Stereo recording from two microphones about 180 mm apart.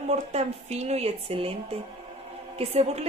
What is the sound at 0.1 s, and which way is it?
A woman's voice, 35° right (ahead or behind).